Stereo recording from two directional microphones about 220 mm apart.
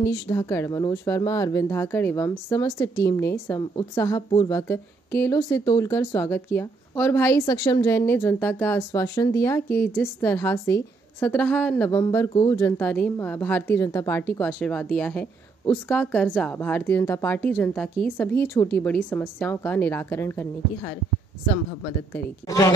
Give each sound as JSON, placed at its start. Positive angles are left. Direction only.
{"t": 0.0, "sound": "speech", "side_deg": 15}
{"t": 22.1, "sound": "speech", "side_deg": 15}